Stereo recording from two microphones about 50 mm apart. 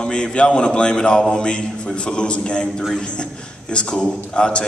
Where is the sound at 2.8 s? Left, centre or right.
Centre.